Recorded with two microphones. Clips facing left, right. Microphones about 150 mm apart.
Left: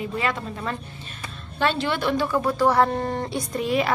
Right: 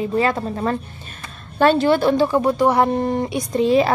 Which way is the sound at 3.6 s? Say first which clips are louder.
Right 8 dB; 30° right (ahead or behind).